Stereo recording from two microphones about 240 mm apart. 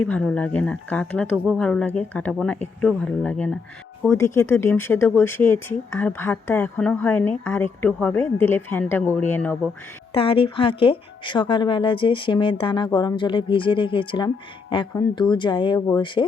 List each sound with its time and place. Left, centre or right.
0.0 s speech: centre
10.2 s speech: left